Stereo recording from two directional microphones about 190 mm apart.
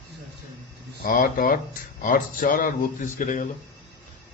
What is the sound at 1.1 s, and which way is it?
Speech, 45° left (ahead or behind).